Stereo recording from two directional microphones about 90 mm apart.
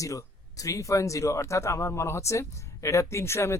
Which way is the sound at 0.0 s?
40° left (ahead or behind).